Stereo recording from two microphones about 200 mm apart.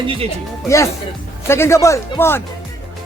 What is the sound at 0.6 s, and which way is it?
Speech, 15° left (ahead or behind).